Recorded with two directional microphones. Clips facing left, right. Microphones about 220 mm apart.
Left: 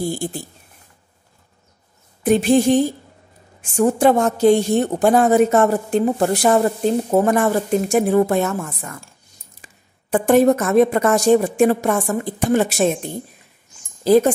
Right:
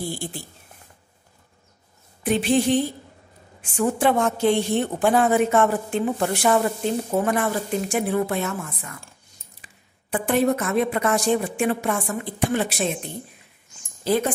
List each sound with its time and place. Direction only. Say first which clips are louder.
0.1 s a woman's voice: left 6 dB; 45° left (ahead or behind)
2.2 s a woman's voice: left 6 dB; 45° left (ahead or behind)
10.1 s a woman's voice: left 7 dB; 45° left (ahead or behind)